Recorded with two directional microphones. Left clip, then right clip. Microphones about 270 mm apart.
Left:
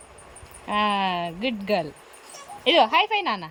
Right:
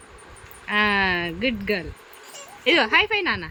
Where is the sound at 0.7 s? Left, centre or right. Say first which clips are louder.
Right 3 dB; centre.